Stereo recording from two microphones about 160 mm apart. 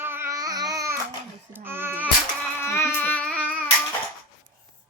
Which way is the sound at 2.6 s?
15° left (ahead or behind).